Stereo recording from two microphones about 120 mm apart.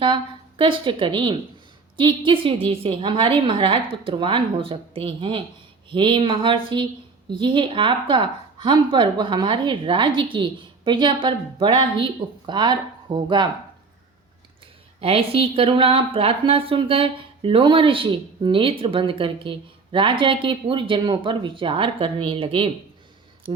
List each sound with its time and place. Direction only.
0.0 s a woman's voice: 45° right (ahead or behind)
15.0 s a woman's voice: 50° right (ahead or behind)